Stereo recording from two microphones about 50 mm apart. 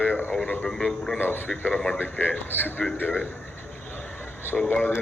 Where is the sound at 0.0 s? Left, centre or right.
Left.